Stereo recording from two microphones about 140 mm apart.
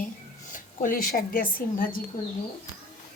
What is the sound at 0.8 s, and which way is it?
A woman's voice, 90° left.